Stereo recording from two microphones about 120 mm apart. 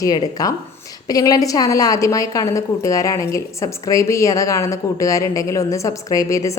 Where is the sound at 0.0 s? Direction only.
30° left (ahead or behind).